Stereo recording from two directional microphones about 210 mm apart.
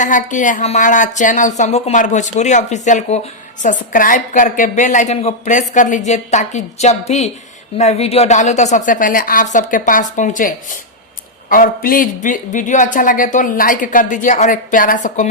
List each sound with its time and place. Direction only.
0.0 s speech: 35° left (ahead or behind)